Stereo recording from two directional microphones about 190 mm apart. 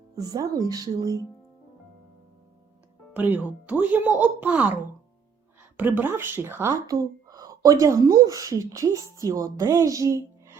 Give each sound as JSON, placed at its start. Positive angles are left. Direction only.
{"t": 0.2, "sound": "speech", "side_deg": -20}
{"t": 3.1, "sound": "speech", "side_deg": -10}
{"t": 5.7, "sound": "speech", "side_deg": -10}